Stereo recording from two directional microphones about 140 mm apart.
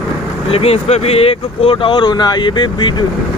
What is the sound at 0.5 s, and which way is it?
Speech, 45° left (ahead or behind).